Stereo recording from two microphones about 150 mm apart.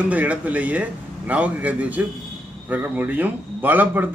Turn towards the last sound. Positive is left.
turn(degrees=-10)  # may be behind; listen again after turning